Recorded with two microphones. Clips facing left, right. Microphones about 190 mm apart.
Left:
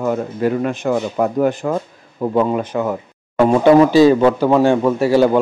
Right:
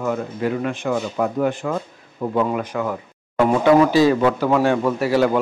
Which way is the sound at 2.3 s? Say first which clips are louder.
Left 4 dB; 30° left (ahead or behind).